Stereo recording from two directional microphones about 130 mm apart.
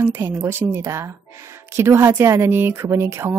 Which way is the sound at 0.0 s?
20° right (ahead or behind).